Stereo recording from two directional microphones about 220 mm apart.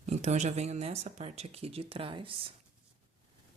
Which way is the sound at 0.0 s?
30° right (ahead or behind).